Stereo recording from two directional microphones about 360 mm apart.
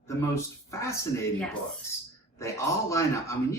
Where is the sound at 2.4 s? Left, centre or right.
Centre.